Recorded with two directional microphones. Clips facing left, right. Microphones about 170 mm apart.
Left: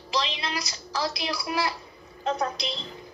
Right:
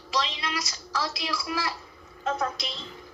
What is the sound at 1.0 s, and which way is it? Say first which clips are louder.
Speech: left 2 dB; 25° left (ahead or behind).